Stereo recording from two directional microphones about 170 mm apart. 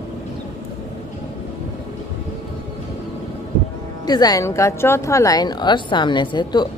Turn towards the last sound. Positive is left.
turn(degrees=25)  # may be behind; listen again after turning